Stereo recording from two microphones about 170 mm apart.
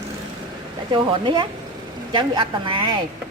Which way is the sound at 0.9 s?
25° right (ahead or behind).